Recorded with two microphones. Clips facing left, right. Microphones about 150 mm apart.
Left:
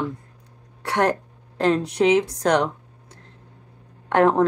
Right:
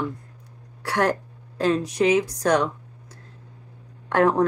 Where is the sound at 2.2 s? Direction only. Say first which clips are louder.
Left 1 dB; 25° left (ahead or behind).